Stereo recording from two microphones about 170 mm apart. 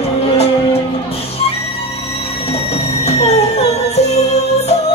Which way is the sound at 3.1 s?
40° left (ahead or behind).